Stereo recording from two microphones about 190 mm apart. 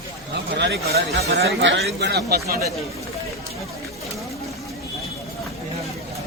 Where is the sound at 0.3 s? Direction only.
65° right (ahead or behind).